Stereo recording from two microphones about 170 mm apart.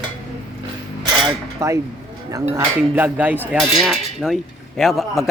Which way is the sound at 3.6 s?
Centre (ahead or behind).